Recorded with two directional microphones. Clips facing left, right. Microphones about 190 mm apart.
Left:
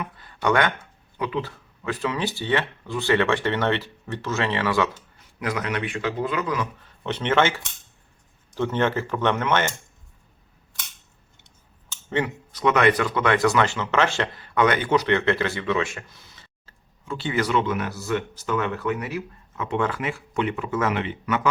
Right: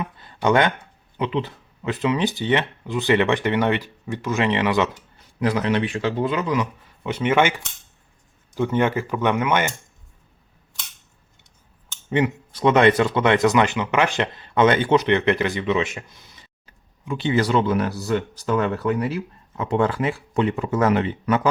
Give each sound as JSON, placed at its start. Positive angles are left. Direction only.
{"t": 0.0, "sound": "a sound", "side_deg": -25}
{"t": 1.2, "sound": "speech", "side_deg": -20}
{"t": 5.4, "sound": "speech", "side_deg": -30}
{"t": 7.0, "sound": "speech", "side_deg": -10}
{"t": 12.1, "sound": "speech", "side_deg": -25}
{"t": 17.3, "sound": "speech", "side_deg": -35}